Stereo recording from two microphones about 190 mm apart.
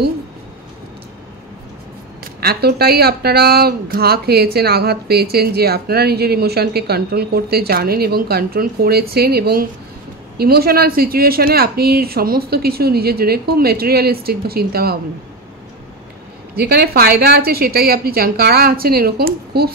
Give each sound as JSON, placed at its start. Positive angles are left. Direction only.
{"t": 2.4, "sound": "a woman's voice", "side_deg": -55}
{"t": 16.5, "sound": "a woman's voice", "side_deg": -55}